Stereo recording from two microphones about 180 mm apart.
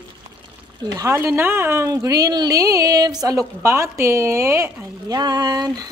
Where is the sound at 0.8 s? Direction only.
20° right (ahead or behind).